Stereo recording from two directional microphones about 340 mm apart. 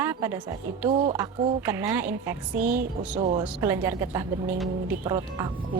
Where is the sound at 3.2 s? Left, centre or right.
Centre.